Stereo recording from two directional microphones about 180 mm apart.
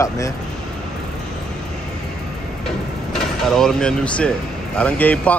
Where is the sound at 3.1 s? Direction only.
5° left (ahead or behind).